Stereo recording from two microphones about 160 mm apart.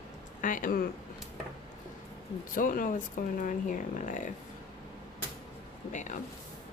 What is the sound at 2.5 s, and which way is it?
Speech, 60° left (ahead or behind).